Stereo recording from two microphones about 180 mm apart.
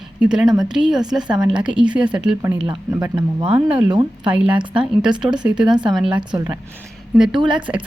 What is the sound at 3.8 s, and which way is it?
Speech, 25° right (ahead or behind).